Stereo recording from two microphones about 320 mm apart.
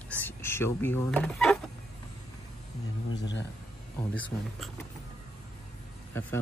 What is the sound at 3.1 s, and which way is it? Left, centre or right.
Speech, left.